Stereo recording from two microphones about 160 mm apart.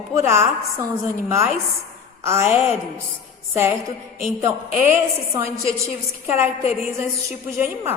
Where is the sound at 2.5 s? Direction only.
40° left (ahead or behind).